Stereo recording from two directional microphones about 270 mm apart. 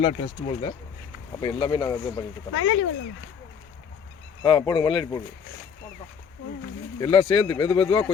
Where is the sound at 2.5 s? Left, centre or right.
Left.